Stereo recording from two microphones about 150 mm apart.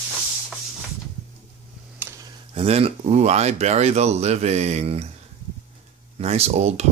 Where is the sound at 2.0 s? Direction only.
15° right (ahead or behind).